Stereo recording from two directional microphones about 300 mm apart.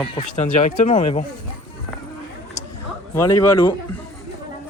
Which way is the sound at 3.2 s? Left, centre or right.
Centre.